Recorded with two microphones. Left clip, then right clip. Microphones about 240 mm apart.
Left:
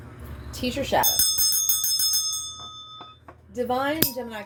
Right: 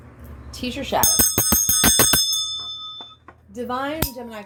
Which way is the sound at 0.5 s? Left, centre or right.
Right.